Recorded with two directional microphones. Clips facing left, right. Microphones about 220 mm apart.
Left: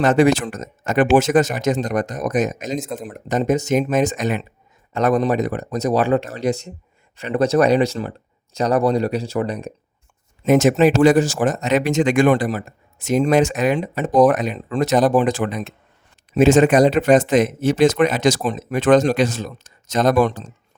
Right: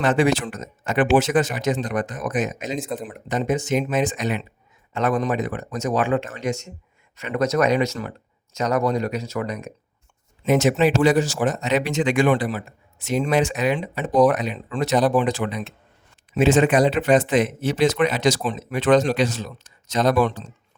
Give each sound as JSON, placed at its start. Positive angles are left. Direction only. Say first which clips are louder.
{"t": 0.0, "sound": "speech", "louder": "left 4 dB", "side_deg": 45}
{"t": 2.8, "sound": "speech", "louder": "even", "side_deg": 0}
{"t": 3.1, "sound": "speech", "louder": "left 6 dB", "side_deg": 40}
{"t": 10.4, "sound": "speech", "louder": "left 4 dB", "side_deg": 45}